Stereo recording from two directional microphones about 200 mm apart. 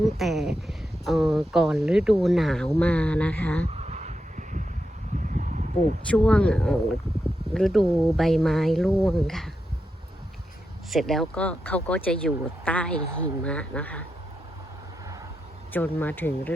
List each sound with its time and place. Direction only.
0.0 s speech: centre (ahead or behind)
3.7 s a sound: 35° right (ahead or behind)
6.1 s speech: 5° left (ahead or behind)
10.9 s speech: centre (ahead or behind)
15.7 s speech: 10° left (ahead or behind)